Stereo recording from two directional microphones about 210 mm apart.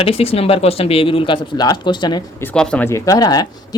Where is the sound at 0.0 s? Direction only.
25° left (ahead or behind).